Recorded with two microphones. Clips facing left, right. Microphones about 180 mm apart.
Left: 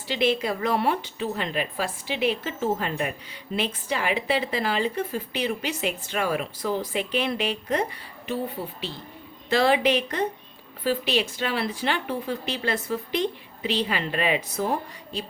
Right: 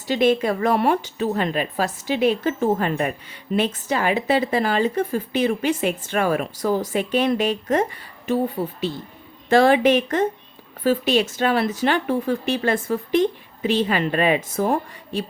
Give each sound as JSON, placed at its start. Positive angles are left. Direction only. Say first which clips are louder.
{"t": 0.1, "sound": "a woman's voice", "louder": "right 6 dB", "side_deg": -50}